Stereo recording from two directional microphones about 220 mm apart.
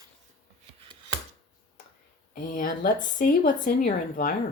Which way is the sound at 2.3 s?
40° left (ahead or behind).